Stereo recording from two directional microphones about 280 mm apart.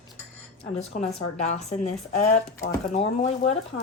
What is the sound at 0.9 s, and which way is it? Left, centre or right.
Speech, left.